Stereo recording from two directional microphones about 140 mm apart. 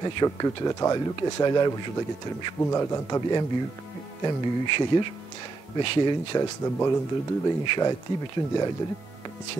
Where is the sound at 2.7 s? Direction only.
20° left (ahead or behind).